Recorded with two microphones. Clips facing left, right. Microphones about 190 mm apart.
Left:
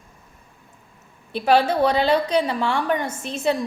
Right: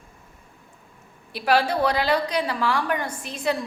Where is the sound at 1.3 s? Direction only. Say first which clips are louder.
Left 3 dB; 25° left (ahead or behind).